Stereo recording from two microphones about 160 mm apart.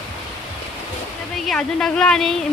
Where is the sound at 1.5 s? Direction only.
5° left (ahead or behind).